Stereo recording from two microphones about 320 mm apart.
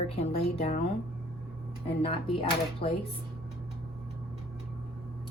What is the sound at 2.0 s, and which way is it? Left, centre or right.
Speech, centre.